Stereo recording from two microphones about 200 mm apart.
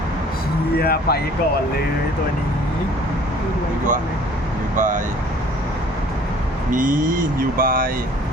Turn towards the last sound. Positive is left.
turn(degrees=-45)  # may be behind; listen again after turning